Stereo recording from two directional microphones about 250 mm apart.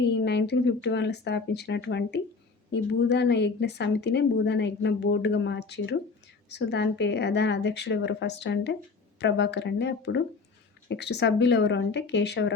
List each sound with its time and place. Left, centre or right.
0.0 s a woman's voice: left